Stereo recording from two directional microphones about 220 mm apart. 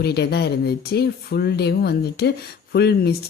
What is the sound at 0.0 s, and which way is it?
Speech, 45° left (ahead or behind).